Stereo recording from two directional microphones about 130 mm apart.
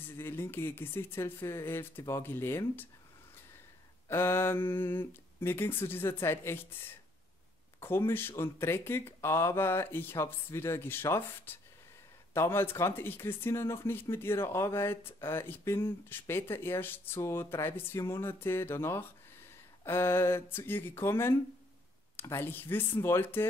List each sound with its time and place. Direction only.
0.0 s speech: 15° left (ahead or behind)
4.1 s speech: 15° left (ahead or behind)